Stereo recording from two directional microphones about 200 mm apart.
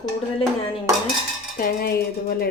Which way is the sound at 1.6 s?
50° left (ahead or behind).